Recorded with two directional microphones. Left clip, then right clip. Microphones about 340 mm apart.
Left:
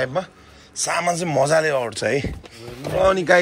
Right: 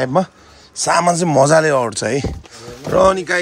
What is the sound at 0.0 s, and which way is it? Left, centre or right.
A man's voice, right.